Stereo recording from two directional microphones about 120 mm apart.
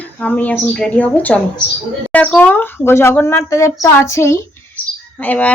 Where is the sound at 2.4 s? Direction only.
15° left (ahead or behind).